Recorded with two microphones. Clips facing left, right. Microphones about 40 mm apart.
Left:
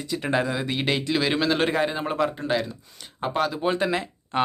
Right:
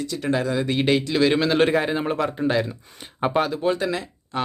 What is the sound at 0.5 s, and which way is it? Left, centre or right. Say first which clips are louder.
A man's voice: right 5 dB; centre.